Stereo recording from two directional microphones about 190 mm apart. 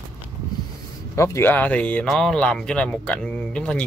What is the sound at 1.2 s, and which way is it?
Speech, 10° left (ahead or behind).